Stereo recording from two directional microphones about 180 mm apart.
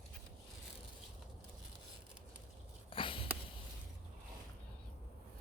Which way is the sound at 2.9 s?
30° left (ahead or behind).